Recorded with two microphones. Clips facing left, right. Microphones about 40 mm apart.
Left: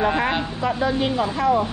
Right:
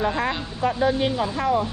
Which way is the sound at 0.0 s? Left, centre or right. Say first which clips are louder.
Left 3 dB; left.